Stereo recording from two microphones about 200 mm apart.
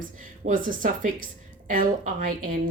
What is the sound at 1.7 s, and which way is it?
Speech, 40° right (ahead or behind).